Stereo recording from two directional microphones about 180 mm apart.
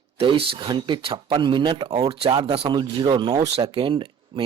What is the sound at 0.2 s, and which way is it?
Speech, 30° right (ahead or behind).